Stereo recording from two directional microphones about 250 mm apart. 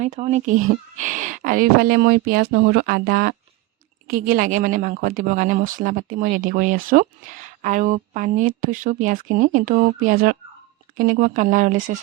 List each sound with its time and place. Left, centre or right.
0.0 s speech: right